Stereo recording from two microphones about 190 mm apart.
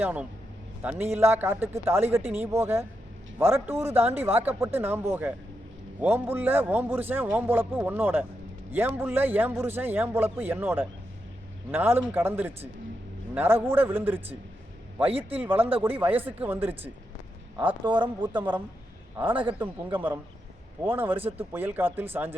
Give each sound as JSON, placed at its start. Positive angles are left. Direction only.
{"t": 0.0, "sound": "a man's voice", "side_deg": -10}
{"t": 15.3, "sound": "a man's voice", "side_deg": -10}
{"t": 17.8, "sound": "speech", "side_deg": -25}
{"t": 19.1, "sound": "a man's voice", "side_deg": -10}